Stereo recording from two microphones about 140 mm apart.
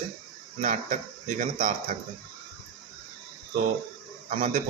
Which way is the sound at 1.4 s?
85° right.